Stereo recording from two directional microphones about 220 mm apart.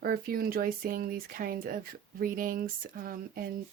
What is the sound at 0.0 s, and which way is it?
Speech, 45° right (ahead or behind).